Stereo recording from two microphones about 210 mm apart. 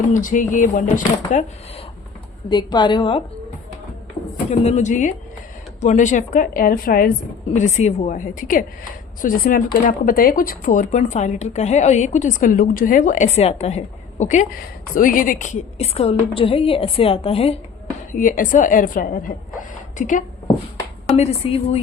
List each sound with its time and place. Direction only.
0.1 s speech: 40° left (ahead or behind)
2.5 s a woman's voice: 20° left (ahead or behind)
4.4 s speech: 30° left (ahead or behind)
7.5 s a woman's voice: 35° left (ahead or behind)
18.1 s a woman's voice: 40° left (ahead or behind)